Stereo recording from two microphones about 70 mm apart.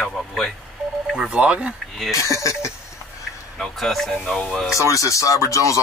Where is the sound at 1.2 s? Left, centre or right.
Centre.